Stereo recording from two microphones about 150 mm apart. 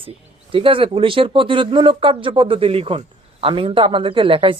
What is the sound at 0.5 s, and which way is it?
Speech, 35° right (ahead or behind).